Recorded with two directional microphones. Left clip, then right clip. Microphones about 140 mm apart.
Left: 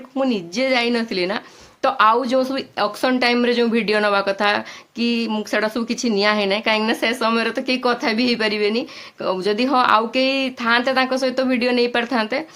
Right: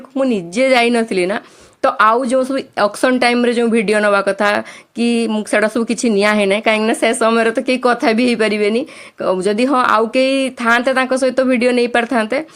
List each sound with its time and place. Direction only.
0.2 s speech: 40° right (ahead or behind)
3.3 s speech: 30° right (ahead or behind)